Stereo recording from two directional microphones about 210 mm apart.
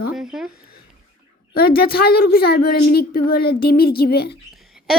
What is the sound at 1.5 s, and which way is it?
A woman's voice, 45° left (ahead or behind).